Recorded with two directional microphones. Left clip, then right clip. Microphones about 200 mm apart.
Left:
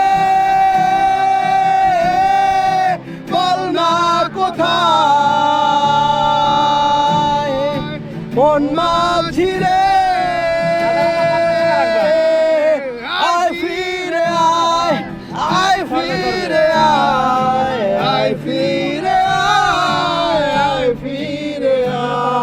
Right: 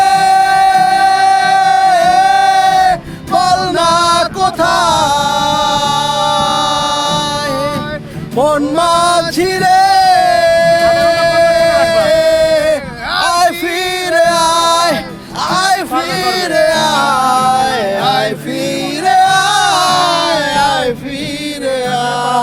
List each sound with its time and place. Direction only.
0.0 s music: 20° right (ahead or behind)
15.4 s a sound: 20° right (ahead or behind)
16.7 s music: 25° right (ahead or behind)